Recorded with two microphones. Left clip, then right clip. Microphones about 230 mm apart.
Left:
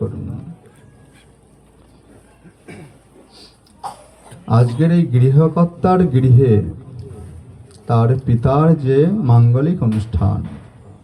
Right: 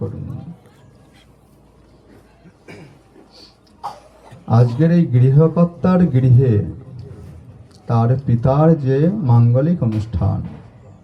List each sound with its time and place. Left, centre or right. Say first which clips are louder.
4.4 s speech: even; left
7.9 s speech: left 2 dB; left